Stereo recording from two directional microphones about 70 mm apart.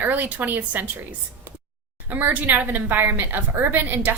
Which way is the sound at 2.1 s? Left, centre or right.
Right.